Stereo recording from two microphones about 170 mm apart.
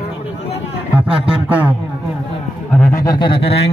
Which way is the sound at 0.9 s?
5° right (ahead or behind).